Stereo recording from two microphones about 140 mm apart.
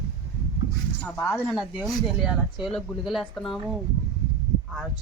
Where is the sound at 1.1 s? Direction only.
15° left (ahead or behind).